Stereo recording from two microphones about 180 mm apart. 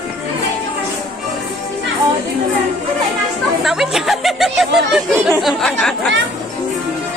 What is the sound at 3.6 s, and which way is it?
Chatter, centre (ahead or behind).